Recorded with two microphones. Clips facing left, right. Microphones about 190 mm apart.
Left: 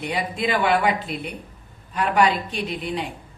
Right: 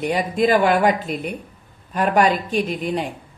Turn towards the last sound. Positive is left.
turn(degrees=-45)  # may be behind; listen again after turning